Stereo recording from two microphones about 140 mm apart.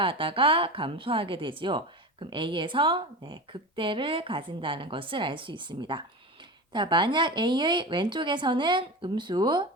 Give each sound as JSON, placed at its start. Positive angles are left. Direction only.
{"t": 0.0, "sound": "a woman's voice", "side_deg": -40}